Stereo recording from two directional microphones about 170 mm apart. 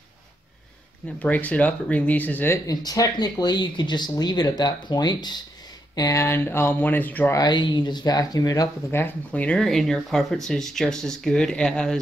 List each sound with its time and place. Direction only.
1.2 s speech: 10° left (ahead or behind)
7.3 s speech: 25° left (ahead or behind); by 12.0 s 5° left (ahead or behind)